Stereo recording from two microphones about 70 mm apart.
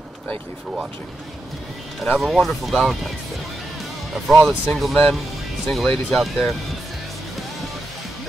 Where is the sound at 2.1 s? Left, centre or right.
Centre.